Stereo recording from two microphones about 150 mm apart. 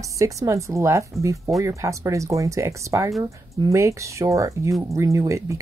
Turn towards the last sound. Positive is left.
turn(degrees=-20)  # may be behind; listen again after turning